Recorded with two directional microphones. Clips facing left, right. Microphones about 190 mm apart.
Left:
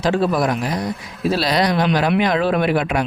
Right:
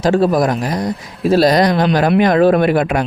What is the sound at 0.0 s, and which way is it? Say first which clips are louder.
Speech: right 5 dB; 40° right (ahead or behind).